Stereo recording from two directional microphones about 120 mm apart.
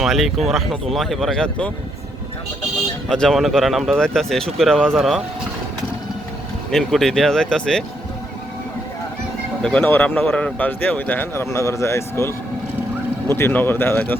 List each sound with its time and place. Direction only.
0.0 s speech: centre (ahead or behind)
3.1 s speech: 5° left (ahead or behind)
6.7 s speech: 5° left (ahead or behind)
9.6 s speech: 10° left (ahead or behind)